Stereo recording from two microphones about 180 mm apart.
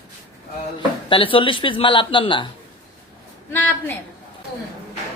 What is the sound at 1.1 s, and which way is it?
Speech, 30° left (ahead or behind).